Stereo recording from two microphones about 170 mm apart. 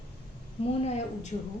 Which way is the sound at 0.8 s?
40° left (ahead or behind).